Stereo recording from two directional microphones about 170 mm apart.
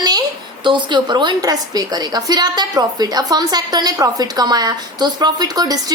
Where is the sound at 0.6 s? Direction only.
25° right (ahead or behind).